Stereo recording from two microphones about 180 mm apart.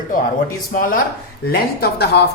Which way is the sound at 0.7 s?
50° left (ahead or behind).